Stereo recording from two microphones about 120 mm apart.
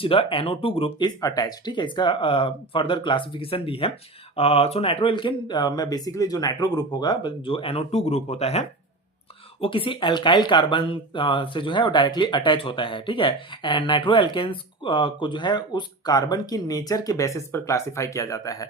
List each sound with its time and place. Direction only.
0.0 s speech: 45° left (ahead or behind)
1.4 s speech: 35° left (ahead or behind); by 8.6 s 65° left (ahead or behind)
9.6 s speech: 50° left (ahead or behind); by 18.7 s 30° left (ahead or behind)